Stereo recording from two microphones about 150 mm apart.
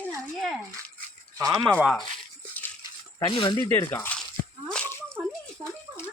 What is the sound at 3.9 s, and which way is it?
Speech, 15° left (ahead or behind).